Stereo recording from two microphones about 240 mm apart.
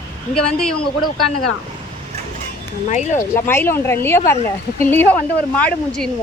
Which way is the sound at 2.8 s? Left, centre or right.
Left.